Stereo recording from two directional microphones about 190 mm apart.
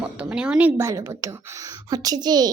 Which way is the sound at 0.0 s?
5° right (ahead or behind).